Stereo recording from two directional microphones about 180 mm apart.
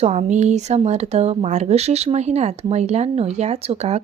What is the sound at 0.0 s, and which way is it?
Speech, 35° right (ahead or behind).